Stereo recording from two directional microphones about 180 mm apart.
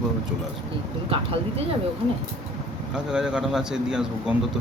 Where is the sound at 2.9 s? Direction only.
5° right (ahead or behind).